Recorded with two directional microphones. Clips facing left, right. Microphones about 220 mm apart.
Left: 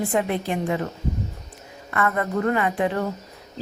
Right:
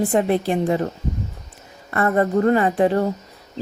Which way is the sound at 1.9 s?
35° right (ahead or behind).